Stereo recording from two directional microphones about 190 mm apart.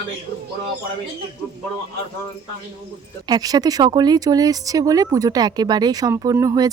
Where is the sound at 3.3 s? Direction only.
20° right (ahead or behind).